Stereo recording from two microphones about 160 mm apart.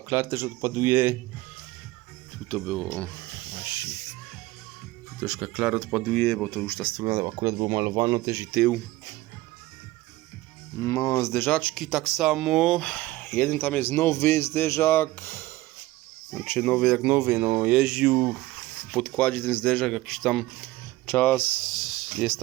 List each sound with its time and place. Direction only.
0.1 s speech: 15° right (ahead or behind)
2.5 s speech: 5° left (ahead or behind)
3.3 s hiss: 30° left (ahead or behind)
5.2 s speech: 5° right (ahead or behind)
6.1 s speech: 10° left (ahead or behind)
7.0 s speech: 25° right (ahead or behind)
8.4 s speech: 5° right (ahead or behind)
10.8 s speech: 20° left (ahead or behind); by 18.4 s 5° right (ahead or behind)
18.5 s speech: 5° left (ahead or behind)